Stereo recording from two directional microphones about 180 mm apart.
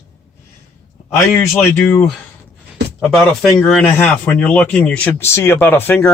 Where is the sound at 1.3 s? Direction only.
10° left (ahead or behind).